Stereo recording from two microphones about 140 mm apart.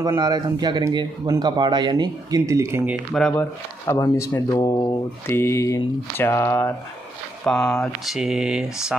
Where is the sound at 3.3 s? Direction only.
15° left (ahead or behind).